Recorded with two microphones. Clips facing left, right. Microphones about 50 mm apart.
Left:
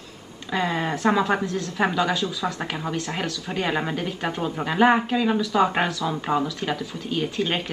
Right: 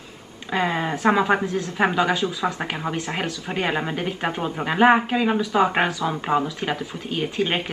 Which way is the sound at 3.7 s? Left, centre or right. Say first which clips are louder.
Even; centre.